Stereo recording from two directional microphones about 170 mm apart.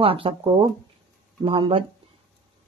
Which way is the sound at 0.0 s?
35° right (ahead or behind).